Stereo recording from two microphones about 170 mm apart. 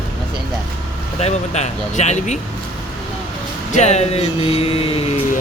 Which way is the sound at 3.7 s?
40° left (ahead or behind).